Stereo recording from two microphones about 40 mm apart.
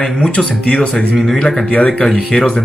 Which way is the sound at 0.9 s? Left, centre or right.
Centre.